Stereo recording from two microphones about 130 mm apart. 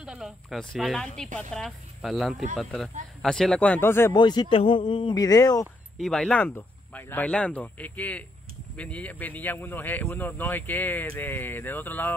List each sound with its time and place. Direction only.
0.0 s a man's voice: 5° right (ahead or behind); by 4.1 s 20° left (ahead or behind)
4.1 s speech: 35° left (ahead or behind)
5.9 s a man's voice: 5° left (ahead or behind)